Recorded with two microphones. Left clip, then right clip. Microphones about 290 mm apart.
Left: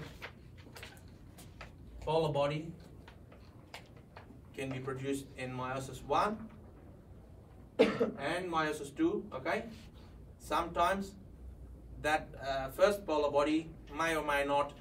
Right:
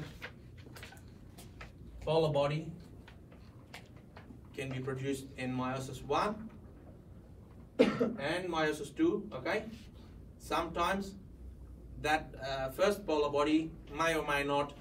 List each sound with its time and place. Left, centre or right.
2.0 s a man's voice: centre
4.6 s a man's voice: centre
7.7 s cough: left
8.2 s a man's voice: centre